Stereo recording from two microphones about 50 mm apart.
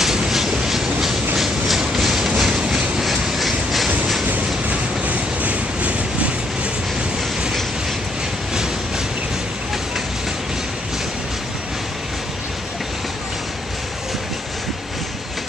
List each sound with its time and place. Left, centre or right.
0.0 s train: centre
1.4 s a sound: centre
2.2 s train: centre
4.6 s train: right